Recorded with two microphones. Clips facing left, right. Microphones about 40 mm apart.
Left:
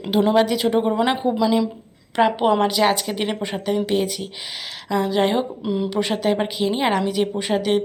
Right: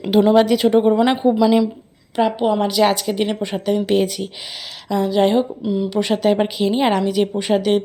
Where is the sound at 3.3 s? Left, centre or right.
Centre.